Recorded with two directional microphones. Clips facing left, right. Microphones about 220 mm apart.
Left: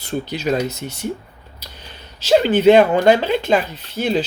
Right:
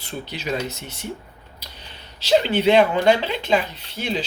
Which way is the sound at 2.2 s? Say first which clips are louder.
Left 5 dB; 50° left (ahead or behind).